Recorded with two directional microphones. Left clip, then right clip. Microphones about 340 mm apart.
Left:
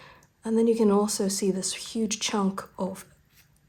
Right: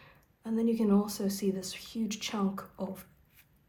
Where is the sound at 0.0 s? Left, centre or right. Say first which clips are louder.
Left 9 dB; centre.